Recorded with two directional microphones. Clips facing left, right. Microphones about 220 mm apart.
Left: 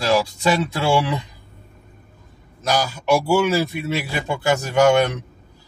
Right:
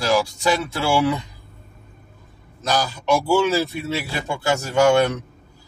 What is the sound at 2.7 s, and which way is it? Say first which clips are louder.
A man's voice: left 1 dB; 10° left (ahead or behind).